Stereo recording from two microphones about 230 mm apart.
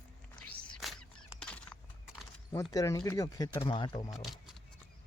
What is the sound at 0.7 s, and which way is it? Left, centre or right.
Horse, centre.